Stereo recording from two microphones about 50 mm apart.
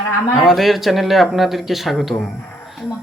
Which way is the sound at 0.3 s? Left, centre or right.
Centre.